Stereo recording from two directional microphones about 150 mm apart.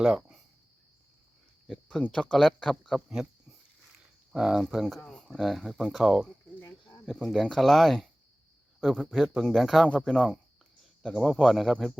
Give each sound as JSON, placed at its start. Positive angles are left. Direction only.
{"t": 0.0, "sound": "cricket", "side_deg": 0}
{"t": 1.6, "sound": "speech", "side_deg": 5}
{"t": 4.3, "sound": "speech", "side_deg": -5}
{"t": 6.6, "sound": "cricket", "side_deg": 20}
{"t": 7.0, "sound": "speech", "side_deg": 0}